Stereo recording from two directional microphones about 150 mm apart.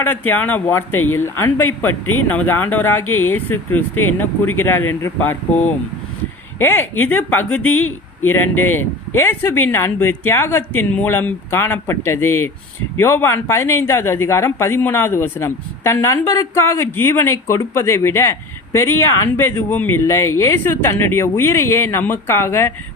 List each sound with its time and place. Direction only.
0.0 s speech: 15° left (ahead or behind)